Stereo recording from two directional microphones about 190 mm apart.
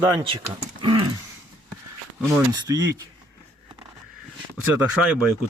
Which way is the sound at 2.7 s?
15° right (ahead or behind).